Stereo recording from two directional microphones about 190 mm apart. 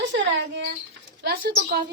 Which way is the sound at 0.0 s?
70° right (ahead or behind).